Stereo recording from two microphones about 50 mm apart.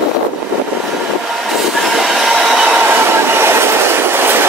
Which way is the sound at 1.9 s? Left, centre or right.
Centre.